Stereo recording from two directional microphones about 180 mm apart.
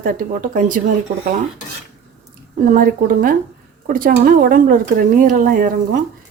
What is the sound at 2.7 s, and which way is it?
A woman's voice, 50° right (ahead or behind).